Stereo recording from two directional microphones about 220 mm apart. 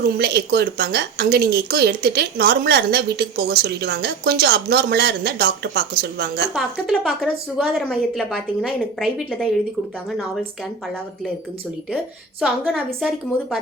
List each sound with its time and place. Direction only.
0.0 s a woman's voice: 50° right (ahead or behind)
6.5 s a woman's voice: centre (ahead or behind)
12.4 s a woman's voice: centre (ahead or behind)